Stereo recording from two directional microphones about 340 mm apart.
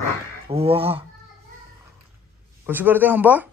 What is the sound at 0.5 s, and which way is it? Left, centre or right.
Speech, centre.